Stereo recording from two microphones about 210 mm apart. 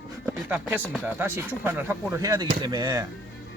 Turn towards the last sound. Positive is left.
turn(degrees=-20)  # may be behind; listen again after turning